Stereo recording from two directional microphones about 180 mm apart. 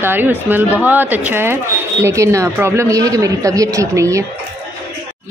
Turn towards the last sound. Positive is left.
turn(degrees=-15)  # may be behind; listen again after turning